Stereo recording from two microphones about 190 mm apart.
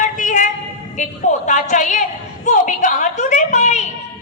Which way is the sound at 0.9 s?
40° left (ahead or behind).